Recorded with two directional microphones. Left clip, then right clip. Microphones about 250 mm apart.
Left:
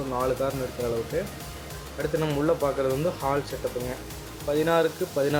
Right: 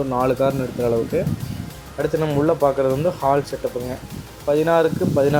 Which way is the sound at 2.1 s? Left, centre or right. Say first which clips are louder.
Right 5 dB; centre.